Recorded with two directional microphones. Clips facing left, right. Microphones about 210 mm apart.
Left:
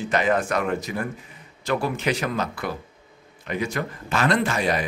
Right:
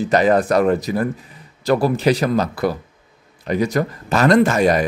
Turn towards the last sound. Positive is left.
turn(degrees=-45)  # may be behind; listen again after turning